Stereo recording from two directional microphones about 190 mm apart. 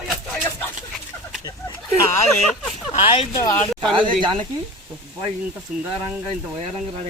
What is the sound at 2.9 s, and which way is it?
Speech, 30° left (ahead or behind).